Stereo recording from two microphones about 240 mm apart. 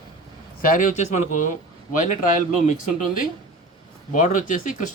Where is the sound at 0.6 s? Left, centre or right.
Left.